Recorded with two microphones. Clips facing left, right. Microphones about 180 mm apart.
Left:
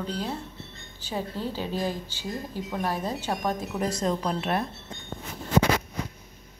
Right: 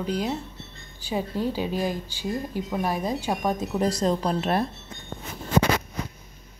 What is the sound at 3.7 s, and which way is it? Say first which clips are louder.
Speech: right 5 dB; 35° right (ahead or behind).